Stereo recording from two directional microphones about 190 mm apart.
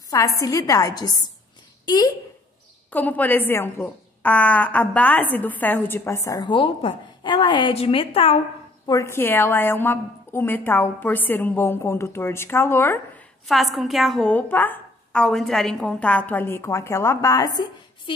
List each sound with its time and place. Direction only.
0.1 s speech: 15° left (ahead or behind)
2.9 s speech: 10° left (ahead or behind); by 8.4 s 30° left (ahead or behind)
8.8 s speech: 15° left (ahead or behind)
13.5 s speech: centre (ahead or behind); by 18.1 s 20° left (ahead or behind)